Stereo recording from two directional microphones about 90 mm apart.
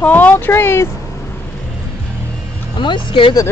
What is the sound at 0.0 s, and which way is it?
Speech, 15° left (ahead or behind).